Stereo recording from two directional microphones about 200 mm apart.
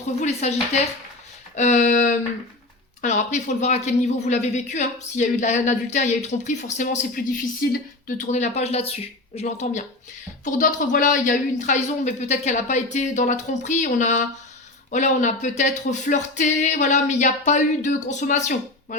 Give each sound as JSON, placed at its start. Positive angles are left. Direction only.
{"t": 0.2, "sound": "speech", "side_deg": 35}